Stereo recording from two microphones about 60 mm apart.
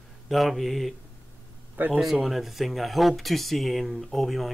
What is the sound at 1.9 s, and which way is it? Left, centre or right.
Speech, centre.